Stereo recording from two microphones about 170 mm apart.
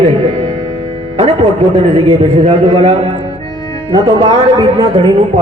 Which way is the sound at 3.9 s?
25° right (ahead or behind).